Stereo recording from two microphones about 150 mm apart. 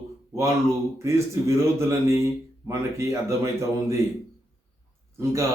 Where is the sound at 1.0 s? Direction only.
20° right (ahead or behind).